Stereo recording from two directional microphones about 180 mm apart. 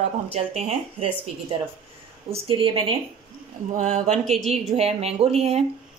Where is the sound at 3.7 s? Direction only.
45° right (ahead or behind).